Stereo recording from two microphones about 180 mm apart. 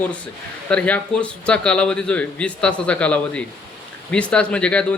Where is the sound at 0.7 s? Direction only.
5° left (ahead or behind).